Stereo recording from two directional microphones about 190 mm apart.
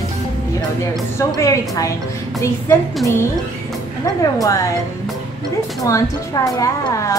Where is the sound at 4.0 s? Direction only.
20° left (ahead or behind).